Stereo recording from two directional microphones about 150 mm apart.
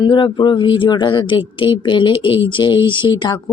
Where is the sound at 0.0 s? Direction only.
30° left (ahead or behind).